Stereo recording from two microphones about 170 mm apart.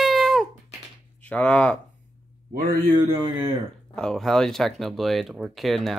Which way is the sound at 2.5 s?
60° right (ahead or behind).